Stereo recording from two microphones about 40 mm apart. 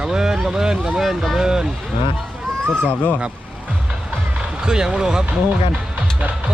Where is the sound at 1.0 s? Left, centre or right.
Centre.